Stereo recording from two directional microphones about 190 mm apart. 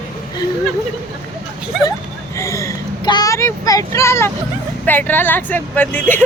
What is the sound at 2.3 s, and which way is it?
Speech, 15° left (ahead or behind).